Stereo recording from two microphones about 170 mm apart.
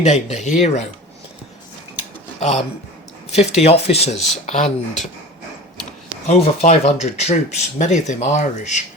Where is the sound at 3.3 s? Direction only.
40° left (ahead or behind).